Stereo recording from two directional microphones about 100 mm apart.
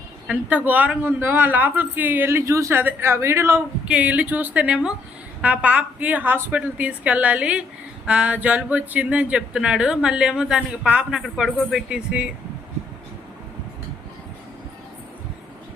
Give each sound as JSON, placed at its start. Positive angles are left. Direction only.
{"t": 0.3, "sound": "speech", "side_deg": -15}
{"t": 3.8, "sound": "speech", "side_deg": -15}